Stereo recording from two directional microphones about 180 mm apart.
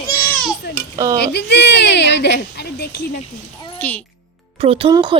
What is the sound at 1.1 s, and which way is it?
Speech, 70° left (ahead or behind).